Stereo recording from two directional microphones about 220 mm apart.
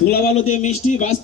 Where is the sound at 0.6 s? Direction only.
35° left (ahead or behind).